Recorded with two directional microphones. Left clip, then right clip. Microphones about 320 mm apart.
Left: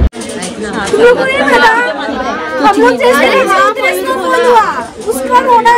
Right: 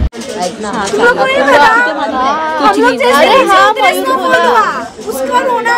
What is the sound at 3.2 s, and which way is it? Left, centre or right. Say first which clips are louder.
Speech: right 2 dB; right.